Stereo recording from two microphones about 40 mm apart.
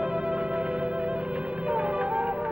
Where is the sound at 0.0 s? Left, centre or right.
Right.